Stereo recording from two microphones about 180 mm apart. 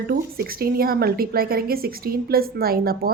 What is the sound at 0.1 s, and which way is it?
A woman's voice, 55° right (ahead or behind).